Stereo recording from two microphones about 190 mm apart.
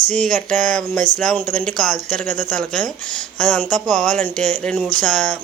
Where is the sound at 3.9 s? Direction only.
40° right (ahead or behind).